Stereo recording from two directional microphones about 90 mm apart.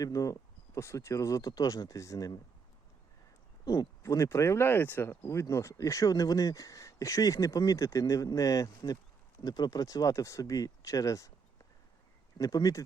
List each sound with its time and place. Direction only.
0.0 s speech: 40° left (ahead or behind)
4.0 s speech: 35° left (ahead or behind)
12.4 s speech: 45° left (ahead or behind)